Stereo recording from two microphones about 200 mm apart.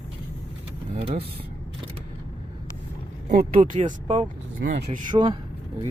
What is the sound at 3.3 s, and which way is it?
Speech, 45° right (ahead or behind).